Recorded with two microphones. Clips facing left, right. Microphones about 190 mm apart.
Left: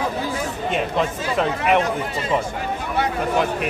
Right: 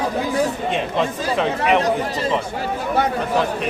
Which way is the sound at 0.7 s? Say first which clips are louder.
Right 1 dB; centre (ahead or behind).